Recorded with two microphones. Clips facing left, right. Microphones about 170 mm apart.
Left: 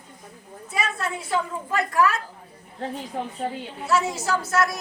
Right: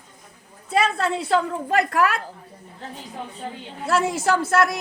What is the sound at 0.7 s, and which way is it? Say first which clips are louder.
A woman's voice: right 7 dB; 70° right (ahead or behind).